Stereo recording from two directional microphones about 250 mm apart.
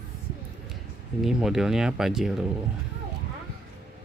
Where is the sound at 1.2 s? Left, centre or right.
Centre.